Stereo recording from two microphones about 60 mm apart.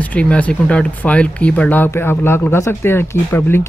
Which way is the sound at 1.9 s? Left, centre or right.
Left.